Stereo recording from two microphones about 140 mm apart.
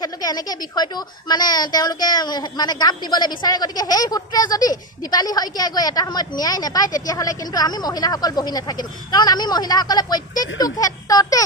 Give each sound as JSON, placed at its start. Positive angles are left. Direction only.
{"t": 0.0, "sound": "a woman's voice", "side_deg": 30}